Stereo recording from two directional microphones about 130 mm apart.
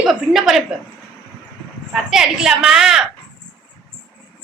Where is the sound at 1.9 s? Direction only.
5° right (ahead or behind).